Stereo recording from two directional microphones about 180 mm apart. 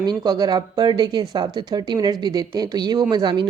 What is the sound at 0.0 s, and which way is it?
Speech, 25° right (ahead or behind).